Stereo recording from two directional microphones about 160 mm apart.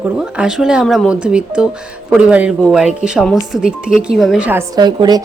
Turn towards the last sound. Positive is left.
turn(degrees=-25)  # may be behind; listen again after turning